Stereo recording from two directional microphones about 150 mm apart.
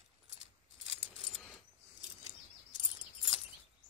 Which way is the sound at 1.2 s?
Centre (ahead or behind).